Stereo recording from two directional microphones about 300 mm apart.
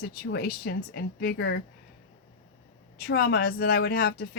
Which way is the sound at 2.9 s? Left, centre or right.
Left.